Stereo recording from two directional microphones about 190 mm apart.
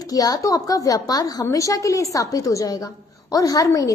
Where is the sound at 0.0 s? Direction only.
20° left (ahead or behind).